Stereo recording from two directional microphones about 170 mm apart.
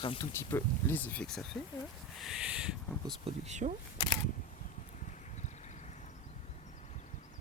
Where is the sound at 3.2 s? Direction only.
40° right (ahead or behind).